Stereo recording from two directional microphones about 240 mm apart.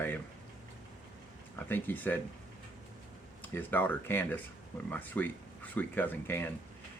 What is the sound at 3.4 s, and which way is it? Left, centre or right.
Speech, centre.